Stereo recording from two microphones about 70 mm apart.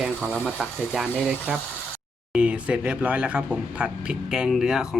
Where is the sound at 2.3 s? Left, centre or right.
Centre.